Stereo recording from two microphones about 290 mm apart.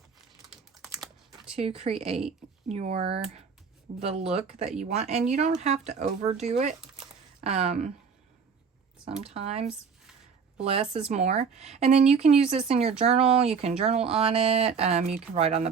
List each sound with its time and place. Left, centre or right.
1.5 s speech: right
9.2 s speech: right
11.1 s speech: right